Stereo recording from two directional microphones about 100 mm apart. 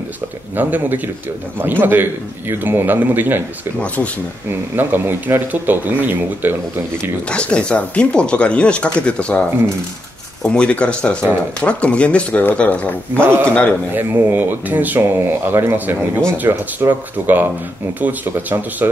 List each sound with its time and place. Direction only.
0.6 s speech: 20° right (ahead or behind)
3.8 s speech: 15° left (ahead or behind)
4.7 s speech: 20° right (ahead or behind)
7.2 s speech: 10° left (ahead or behind)
13.2 s speech: 25° right (ahead or behind)